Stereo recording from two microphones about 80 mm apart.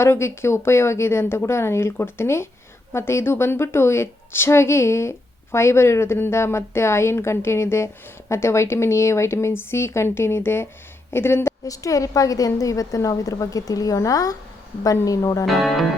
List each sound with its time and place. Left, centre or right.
0.0 s a woman's voice: left
11.6 s a woman's voice: left
15.4 s speech: centre